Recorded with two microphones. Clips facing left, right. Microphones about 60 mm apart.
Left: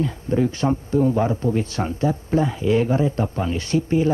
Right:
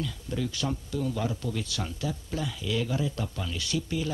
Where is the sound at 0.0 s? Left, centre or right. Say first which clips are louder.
Left 11 dB; left.